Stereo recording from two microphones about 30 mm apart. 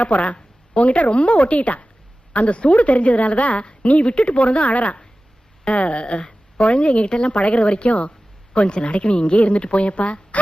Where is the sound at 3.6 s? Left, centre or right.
Left.